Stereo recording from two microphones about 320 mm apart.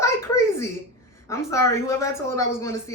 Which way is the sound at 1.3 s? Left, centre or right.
Centre.